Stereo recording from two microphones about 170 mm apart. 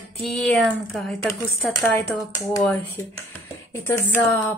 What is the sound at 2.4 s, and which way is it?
Speech, 15° left (ahead or behind).